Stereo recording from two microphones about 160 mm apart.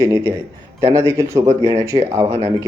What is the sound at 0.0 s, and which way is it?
Speech, 15° right (ahead or behind).